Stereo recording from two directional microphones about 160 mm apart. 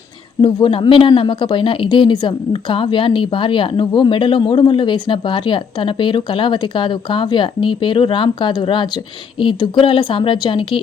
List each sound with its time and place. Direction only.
0.4 s speech: 30° left (ahead or behind)